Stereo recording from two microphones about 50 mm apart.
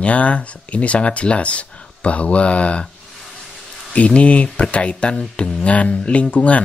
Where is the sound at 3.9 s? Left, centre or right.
Left.